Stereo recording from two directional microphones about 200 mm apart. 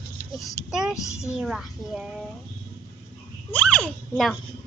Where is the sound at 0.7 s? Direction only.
5° right (ahead or behind).